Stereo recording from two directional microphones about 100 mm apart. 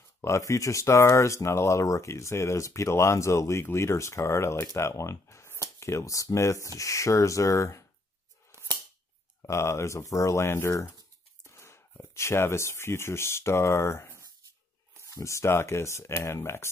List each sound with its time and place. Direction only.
0.2 s speech: 30° left (ahead or behind)
9.4 s speech: 30° left (ahead or behind)